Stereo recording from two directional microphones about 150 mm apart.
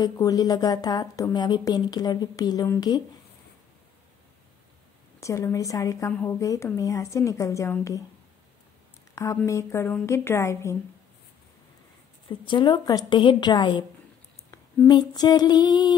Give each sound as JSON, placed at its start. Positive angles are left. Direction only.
{"t": 0.0, "sound": "a woman's voice", "side_deg": 25}
{"t": 5.2, "sound": "a woman's voice", "side_deg": 20}
{"t": 9.1, "sound": "a woman's voice", "side_deg": 20}
{"t": 12.3, "sound": "a woman's voice", "side_deg": 30}
{"t": 14.5, "sound": "female singing", "side_deg": 25}